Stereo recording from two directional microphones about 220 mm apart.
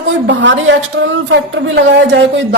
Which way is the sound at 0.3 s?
55° right (ahead or behind).